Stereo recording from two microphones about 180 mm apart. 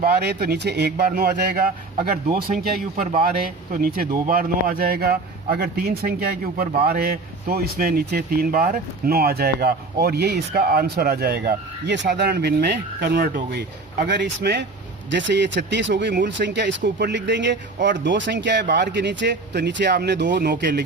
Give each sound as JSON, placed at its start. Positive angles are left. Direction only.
{"t": 0.0, "sound": "speech", "side_deg": -65}
{"t": 14.1, "sound": "speech", "side_deg": -70}